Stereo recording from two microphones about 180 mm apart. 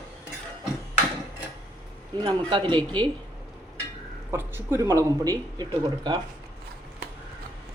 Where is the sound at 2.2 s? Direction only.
25° right (ahead or behind).